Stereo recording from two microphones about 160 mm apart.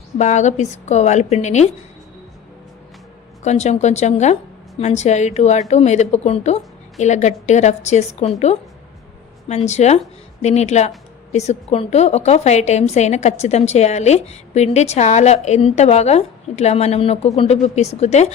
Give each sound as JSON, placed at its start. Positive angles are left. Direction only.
{"t": 0.2, "sound": "speech", "side_deg": 50}
{"t": 3.4, "sound": "speech", "side_deg": 45}